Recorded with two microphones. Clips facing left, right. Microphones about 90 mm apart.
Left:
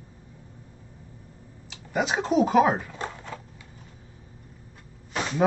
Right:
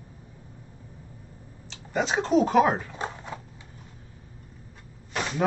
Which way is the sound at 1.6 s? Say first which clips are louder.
Left 1 dB; 5° left (ahead or behind).